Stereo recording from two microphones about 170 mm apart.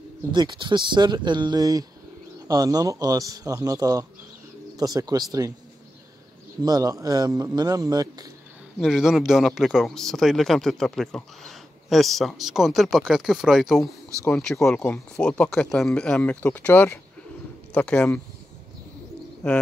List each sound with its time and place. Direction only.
0.3 s a man's voice: 25° right (ahead or behind)
6.6 s a man's voice: 20° right (ahead or behind)
8.7 s speech: centre (ahead or behind)